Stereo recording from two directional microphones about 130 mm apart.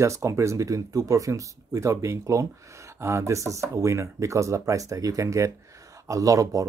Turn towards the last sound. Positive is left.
turn(degrees=-25)  # may be behind; listen again after turning